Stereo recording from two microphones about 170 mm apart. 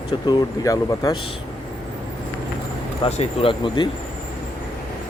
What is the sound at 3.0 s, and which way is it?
Speech, 35° left (ahead or behind).